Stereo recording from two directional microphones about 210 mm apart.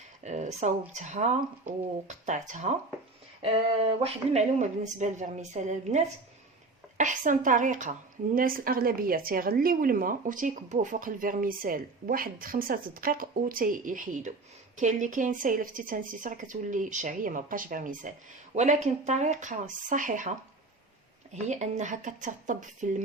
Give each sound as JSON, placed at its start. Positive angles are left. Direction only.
{"t": 0.3, "sound": "a woman's voice", "side_deg": -35}
{"t": 21.4, "sound": "speech", "side_deg": -35}